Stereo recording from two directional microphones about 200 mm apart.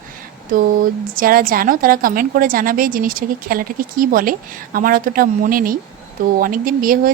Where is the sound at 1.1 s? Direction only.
45° right (ahead or behind).